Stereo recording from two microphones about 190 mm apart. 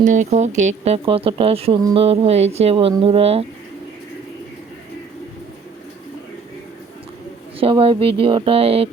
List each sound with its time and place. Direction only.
0.0 s speech: 40° right (ahead or behind)
7.6 s music: 30° right (ahead or behind)